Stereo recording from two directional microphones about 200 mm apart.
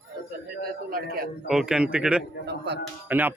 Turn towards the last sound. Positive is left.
turn(degrees=-10)  # may be behind; listen again after turning